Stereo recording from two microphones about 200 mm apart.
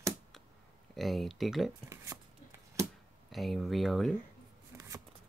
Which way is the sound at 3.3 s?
Centre (ahead or behind).